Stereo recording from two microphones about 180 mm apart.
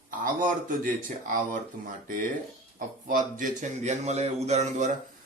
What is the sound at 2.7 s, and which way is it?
Speech, 50° right (ahead or behind).